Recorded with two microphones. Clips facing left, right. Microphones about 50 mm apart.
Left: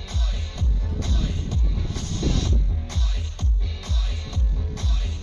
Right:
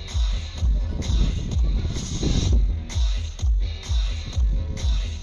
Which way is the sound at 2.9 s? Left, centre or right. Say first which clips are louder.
Left 2 dB; centre.